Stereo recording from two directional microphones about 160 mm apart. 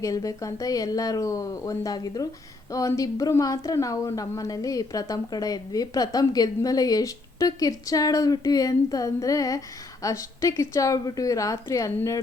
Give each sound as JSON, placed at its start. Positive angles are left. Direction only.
{"t": 0.0, "sound": "a woman's voice", "side_deg": 20}